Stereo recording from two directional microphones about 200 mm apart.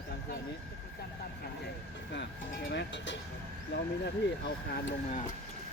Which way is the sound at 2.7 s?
60° left (ahead or behind).